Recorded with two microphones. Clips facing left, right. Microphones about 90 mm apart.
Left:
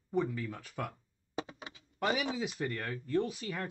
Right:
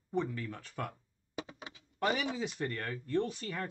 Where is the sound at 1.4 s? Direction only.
30° left (ahead or behind).